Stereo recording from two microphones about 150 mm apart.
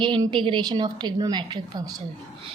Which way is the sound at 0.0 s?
30° right (ahead or behind).